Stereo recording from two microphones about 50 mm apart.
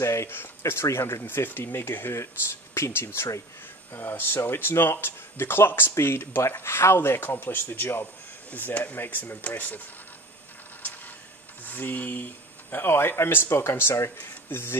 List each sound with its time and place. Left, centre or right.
0.0 s a sound: left
0.6 s speech: left
1.2 s speech: left
3.2 s speech: left
3.9 s speech: left
11.6 s a sound: left
12.7 s speech: left